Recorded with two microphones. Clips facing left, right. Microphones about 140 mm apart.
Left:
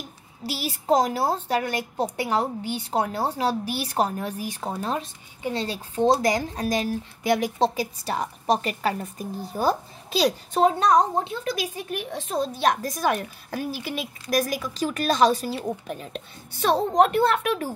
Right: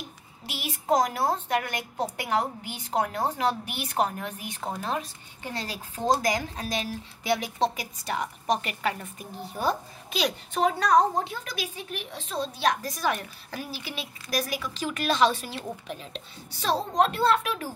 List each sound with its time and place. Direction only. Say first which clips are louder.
0.5 s speech: left 3 dB; 35° left (ahead or behind)
5.4 s speech: left 7 dB; 25° left (ahead or behind)
12.3 s a woman's voice: left 3 dB; 50° left (ahead or behind)